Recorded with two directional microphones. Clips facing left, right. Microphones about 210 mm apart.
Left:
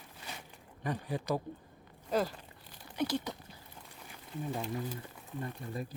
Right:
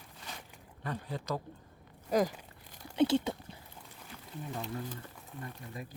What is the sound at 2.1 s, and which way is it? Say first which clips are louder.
Speech: right 3 dB; 10° right (ahead or behind).